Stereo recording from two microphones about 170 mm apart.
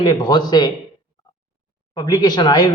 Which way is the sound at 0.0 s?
30° left (ahead or behind).